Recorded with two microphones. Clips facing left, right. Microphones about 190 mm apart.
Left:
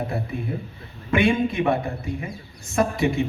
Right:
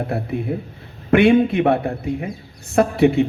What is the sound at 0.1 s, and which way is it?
A man's voice, 60° right (ahead or behind).